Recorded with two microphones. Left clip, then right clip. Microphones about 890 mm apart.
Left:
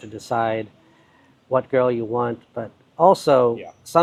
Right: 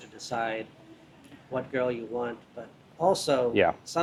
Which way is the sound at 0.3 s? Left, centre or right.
Left.